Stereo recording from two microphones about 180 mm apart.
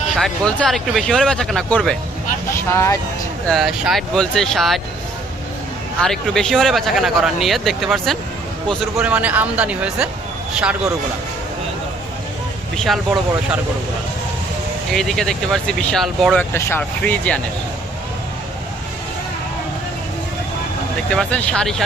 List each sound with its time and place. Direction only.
0.2 s speech: 5° left (ahead or behind)
2.6 s speech: 15° left (ahead or behind)
3.4 s speech: centre (ahead or behind)
6.0 s speech: 5° left (ahead or behind)
12.7 s speech: centre (ahead or behind)
14.9 s speech: centre (ahead or behind)
16.5 s speech: 15° left (ahead or behind)
21.1 s speech: 5° left (ahead or behind)